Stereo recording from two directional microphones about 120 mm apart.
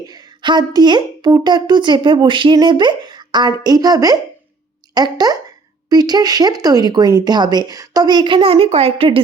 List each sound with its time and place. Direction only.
0.0 s speech: 35° right (ahead or behind)